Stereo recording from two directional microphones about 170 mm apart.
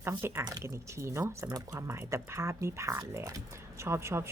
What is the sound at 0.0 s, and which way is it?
Speech, 15° right (ahead or behind).